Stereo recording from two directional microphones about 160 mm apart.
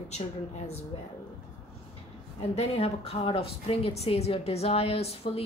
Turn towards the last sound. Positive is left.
turn(degrees=40)  # may be behind; listen again after turning